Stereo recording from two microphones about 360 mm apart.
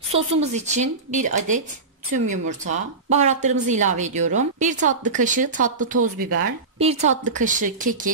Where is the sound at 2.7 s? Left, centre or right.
Centre.